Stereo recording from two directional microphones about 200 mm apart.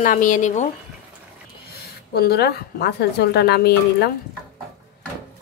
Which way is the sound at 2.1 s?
50° left (ahead or behind).